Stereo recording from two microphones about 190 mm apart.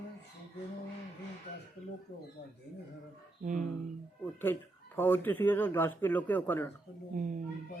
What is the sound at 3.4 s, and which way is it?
Speech, 45° right (ahead or behind).